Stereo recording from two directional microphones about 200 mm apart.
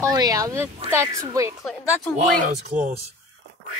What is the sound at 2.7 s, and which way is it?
Speech, 40° right (ahead or behind).